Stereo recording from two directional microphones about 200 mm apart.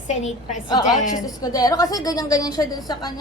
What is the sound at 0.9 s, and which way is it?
Speech, 40° left (ahead or behind).